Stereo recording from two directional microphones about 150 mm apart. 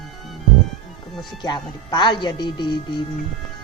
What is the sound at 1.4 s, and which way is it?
Speech, 30° left (ahead or behind).